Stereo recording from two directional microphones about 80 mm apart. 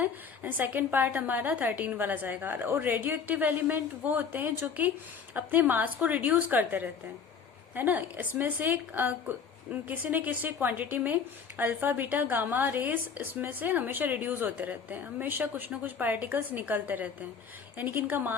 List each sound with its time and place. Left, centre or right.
0.0 s speech: right